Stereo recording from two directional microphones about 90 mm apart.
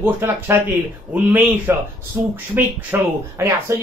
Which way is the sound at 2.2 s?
30° right (ahead or behind).